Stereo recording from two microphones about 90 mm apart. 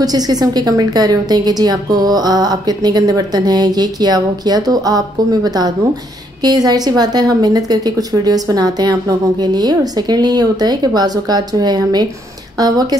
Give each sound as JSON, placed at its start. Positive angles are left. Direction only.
{"t": 0.0, "sound": "a woman's voice", "side_deg": -45}